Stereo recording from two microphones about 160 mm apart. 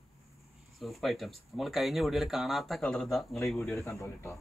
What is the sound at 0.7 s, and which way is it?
Speech, centre (ahead or behind).